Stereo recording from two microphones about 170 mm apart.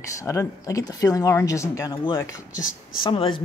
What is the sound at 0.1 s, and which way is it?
Speech, 20° left (ahead or behind).